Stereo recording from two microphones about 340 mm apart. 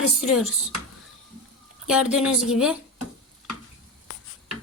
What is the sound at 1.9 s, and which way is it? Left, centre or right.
Speech, centre.